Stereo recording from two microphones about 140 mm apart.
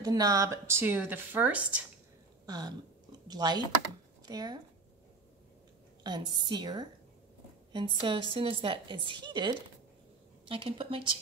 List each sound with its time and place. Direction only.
0.0 s speech: 25° right (ahead or behind); by 1.8 s 10° right (ahead or behind)
2.4 s a sound: 30° right (ahead or behind)
4.3 s speech: 30° right (ahead or behind)
6.0 s a woman's voice: 35° right (ahead or behind)